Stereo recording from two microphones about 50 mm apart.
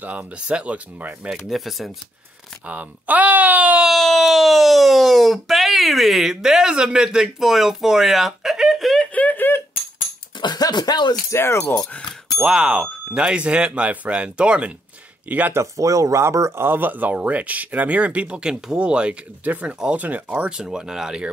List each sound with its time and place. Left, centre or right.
0.0 s speech: right
1.3 s speech: centre
2.7 s speech: right
3.8 s speech: centre
9.1 s a sound: left
11.2 s speech: left
12.4 s speech: centre; by 15.5 s right
15.5 s speech: right
16.6 s speech: right; by 21.3 s centre